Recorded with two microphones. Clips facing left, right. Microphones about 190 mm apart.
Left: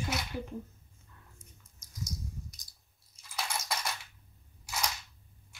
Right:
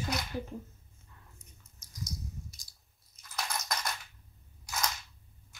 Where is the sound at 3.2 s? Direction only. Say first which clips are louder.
Even; 10° left (ahead or behind).